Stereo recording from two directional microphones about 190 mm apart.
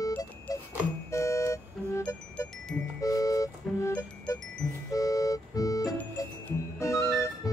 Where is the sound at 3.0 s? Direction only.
20° left (ahead or behind).